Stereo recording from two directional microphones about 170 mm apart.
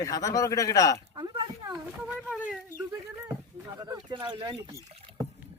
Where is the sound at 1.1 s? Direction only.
25° right (ahead or behind).